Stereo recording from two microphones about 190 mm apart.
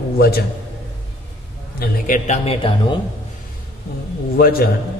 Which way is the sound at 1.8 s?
45° left (ahead or behind).